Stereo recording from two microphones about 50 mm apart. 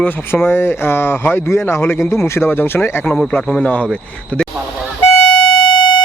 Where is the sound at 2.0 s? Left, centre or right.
Left.